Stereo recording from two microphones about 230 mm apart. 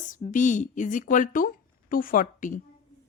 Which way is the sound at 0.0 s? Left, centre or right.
Left.